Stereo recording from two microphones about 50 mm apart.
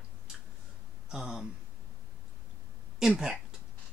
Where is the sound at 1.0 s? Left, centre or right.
Centre.